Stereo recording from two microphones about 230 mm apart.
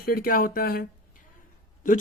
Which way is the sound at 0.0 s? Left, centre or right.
Left.